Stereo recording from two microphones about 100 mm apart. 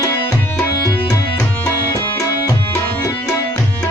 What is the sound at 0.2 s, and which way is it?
Tabla, 20° left (ahead or behind).